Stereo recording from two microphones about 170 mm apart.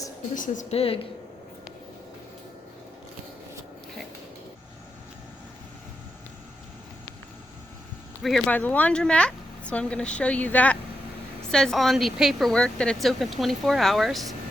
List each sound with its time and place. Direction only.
0.3 s a woman's voice: 50° left (ahead or behind)
8.2 s speech: centre (ahead or behind)